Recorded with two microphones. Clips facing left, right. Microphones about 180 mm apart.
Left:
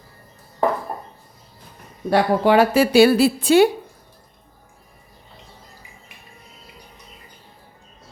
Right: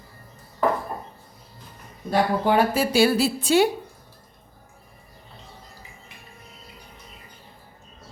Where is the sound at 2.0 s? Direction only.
85° left; by 3.7 s 60° left (ahead or behind).